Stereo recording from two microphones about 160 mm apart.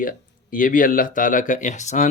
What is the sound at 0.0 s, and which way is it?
Speech, 55° left (ahead or behind).